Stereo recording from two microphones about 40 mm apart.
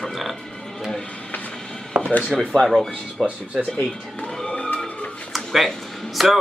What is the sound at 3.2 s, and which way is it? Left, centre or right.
Speech, centre.